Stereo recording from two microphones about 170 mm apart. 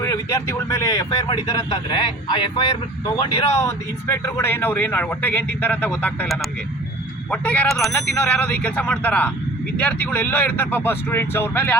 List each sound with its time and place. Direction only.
0.0 s speech: 15° left (ahead or behind)
3.6 s speech: 15° left (ahead or behind)